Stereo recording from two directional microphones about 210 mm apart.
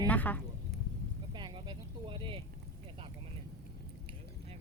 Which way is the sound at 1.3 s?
20° right (ahead or behind).